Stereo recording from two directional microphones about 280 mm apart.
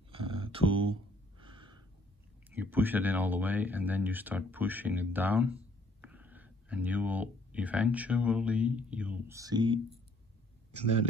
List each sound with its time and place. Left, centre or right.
0.1 s a sound: centre
1.4 s gasp: centre
2.5 s speech: centre